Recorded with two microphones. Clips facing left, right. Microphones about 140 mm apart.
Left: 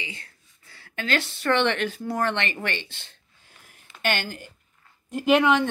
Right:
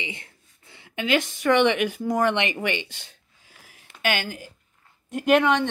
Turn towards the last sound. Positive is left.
turn(degrees=5)  # may be behind; listen again after turning